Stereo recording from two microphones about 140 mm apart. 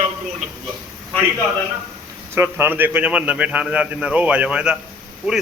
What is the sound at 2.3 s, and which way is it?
A man's voice, 15° right (ahead or behind).